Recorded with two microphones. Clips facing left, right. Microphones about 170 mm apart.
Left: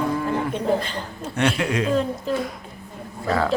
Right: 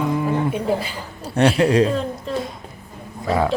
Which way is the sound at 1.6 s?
35° right (ahead or behind).